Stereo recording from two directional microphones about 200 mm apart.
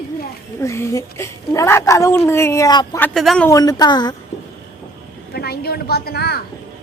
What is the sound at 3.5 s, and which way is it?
Speech, 20° left (ahead or behind).